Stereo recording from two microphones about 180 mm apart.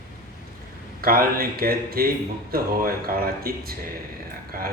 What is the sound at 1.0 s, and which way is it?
A man's voice, 55° right (ahead or behind).